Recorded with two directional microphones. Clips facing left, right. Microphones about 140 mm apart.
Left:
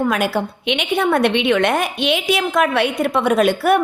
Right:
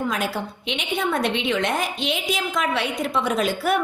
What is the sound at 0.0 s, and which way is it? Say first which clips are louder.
A woman's voice: left 7 dB; 65° left (ahead or behind).